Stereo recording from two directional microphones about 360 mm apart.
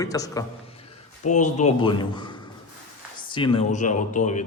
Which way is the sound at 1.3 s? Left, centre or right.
Centre.